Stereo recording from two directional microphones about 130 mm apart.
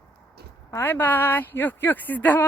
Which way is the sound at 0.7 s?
15° left (ahead or behind).